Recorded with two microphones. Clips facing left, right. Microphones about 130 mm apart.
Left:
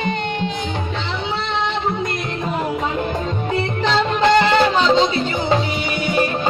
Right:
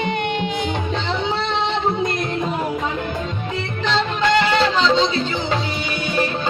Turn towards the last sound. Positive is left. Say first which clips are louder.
# left 2 dB
turn(degrees=40)  # may be behind; listen again after turning